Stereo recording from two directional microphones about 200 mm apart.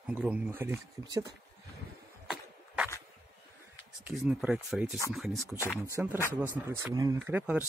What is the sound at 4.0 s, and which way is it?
Speech, centre (ahead or behind).